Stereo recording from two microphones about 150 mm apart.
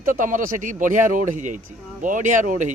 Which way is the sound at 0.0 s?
60° right (ahead or behind).